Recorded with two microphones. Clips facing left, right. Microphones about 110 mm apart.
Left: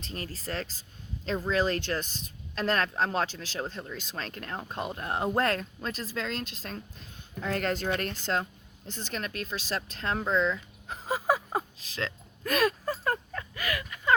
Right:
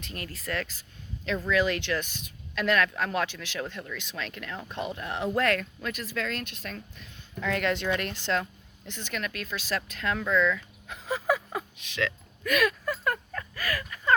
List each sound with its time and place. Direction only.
0.0 s speech: 35° left (ahead or behind)